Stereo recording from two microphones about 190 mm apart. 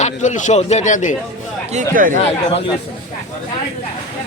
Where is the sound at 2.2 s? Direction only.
30° left (ahead or behind).